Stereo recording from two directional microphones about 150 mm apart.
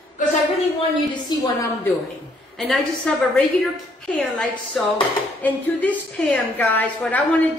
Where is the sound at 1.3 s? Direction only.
30° left (ahead or behind).